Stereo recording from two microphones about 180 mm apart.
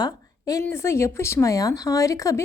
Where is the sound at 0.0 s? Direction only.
20° left (ahead or behind).